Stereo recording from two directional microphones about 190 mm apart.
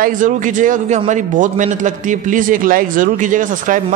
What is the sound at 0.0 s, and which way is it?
A man's voice, 45° right (ahead or behind).